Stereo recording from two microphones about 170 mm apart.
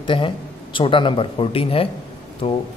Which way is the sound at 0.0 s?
30° left (ahead or behind).